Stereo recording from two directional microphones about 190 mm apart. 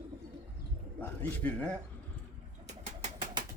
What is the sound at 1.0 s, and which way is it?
Speech, 5° left (ahead or behind).